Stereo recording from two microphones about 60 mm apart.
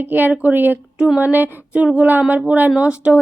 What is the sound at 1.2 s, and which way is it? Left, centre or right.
Speech, right.